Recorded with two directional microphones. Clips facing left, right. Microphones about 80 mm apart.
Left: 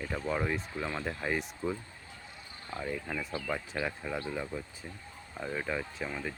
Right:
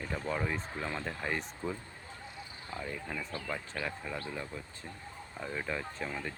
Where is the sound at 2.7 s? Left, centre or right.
Centre.